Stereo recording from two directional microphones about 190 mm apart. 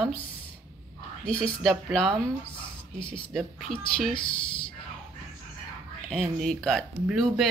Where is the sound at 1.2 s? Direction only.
5° left (ahead or behind).